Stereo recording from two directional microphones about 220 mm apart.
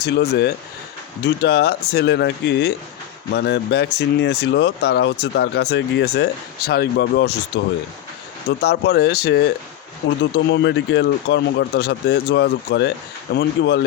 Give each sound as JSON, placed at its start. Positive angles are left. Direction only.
{"t": 0.0, "sound": "speech", "side_deg": 50}